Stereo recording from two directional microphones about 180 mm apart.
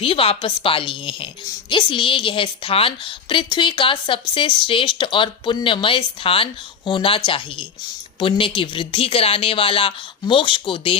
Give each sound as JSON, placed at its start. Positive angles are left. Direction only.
{"t": 0.0, "sound": "a woman's voice", "side_deg": 30}